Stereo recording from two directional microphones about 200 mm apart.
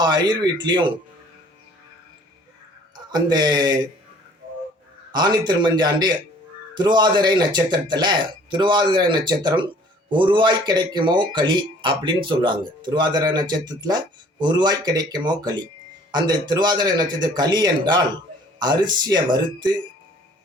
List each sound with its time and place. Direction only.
0.0 s speech: 20° right (ahead or behind)
2.9 s speech: 20° right (ahead or behind)
5.1 s speech: 20° right (ahead or behind)